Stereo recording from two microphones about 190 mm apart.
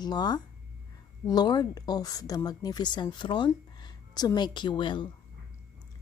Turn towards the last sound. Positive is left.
turn(degrees=25)  # may be behind; listen again after turning